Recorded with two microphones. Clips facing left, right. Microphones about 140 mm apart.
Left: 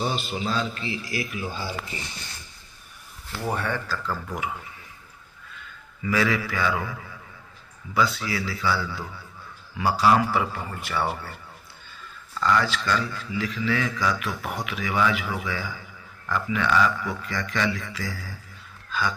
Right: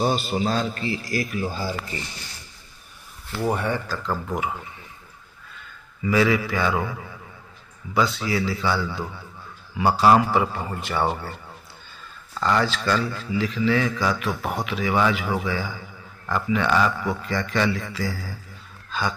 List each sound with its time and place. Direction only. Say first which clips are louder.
0.0 s a man's voice: right 5 dB; 40° right (ahead or behind)
3.4 s speech: right 3 dB; 15° right (ahead or behind)
4.1 s a man's voice: right 6 dB; 30° right (ahead or behind)
6.0 s a man's voice: right 4 dB; 20° right (ahead or behind)
7.9 s a man's voice: right 2 dB; 25° right (ahead or behind)
12.4 s a man's voice: right 1 dB; 35° right (ahead or behind)